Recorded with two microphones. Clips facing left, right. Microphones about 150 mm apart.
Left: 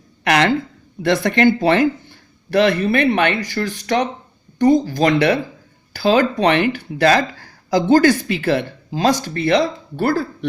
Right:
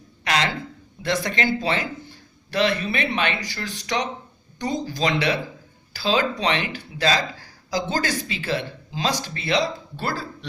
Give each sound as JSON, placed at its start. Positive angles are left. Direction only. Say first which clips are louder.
{"t": 0.3, "sound": "speech", "louder": "left 8 dB", "side_deg": 60}